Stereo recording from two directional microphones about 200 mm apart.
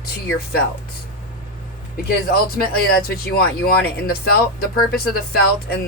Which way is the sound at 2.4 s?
50° left (ahead or behind).